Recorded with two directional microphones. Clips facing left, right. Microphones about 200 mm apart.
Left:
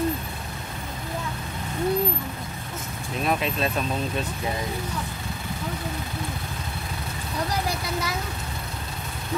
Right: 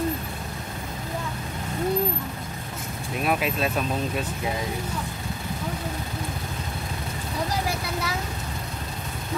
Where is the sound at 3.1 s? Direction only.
5° right (ahead or behind).